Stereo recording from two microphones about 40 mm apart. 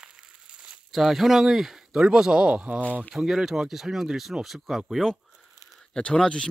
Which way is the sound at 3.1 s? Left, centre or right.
Centre.